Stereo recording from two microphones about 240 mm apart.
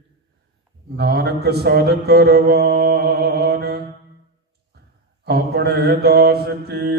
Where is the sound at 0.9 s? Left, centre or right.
Right.